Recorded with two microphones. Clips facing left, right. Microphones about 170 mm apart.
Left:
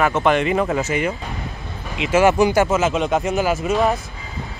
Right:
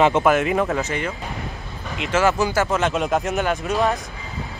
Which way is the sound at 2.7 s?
5° left (ahead or behind).